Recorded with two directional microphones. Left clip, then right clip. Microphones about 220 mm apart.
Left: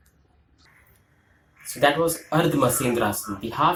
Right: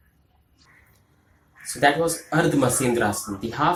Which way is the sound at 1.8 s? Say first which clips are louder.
Even; centre (ahead or behind).